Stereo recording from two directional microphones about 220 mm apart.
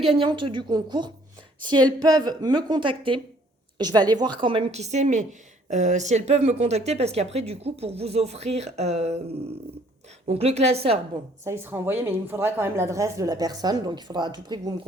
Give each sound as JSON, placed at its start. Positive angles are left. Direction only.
{"t": 0.2, "sound": "speech", "side_deg": -20}
{"t": 10.2, "sound": "speech", "side_deg": -30}
{"t": 11.4, "sound": "speech", "side_deg": -10}